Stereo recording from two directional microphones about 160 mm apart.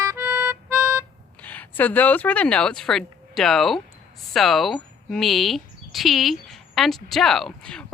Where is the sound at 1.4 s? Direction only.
10° left (ahead or behind).